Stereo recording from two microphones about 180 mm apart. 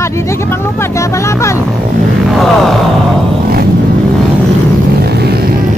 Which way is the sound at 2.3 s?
Centre (ahead or behind).